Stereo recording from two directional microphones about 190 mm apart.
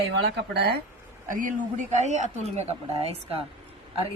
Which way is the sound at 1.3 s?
45° right (ahead or behind).